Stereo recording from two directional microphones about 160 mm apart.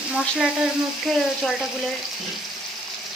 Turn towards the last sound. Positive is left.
turn(degrees=0)  # may be behind; listen again after turning